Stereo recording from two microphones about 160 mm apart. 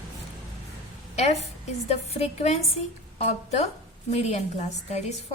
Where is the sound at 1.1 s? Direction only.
45° left (ahead or behind).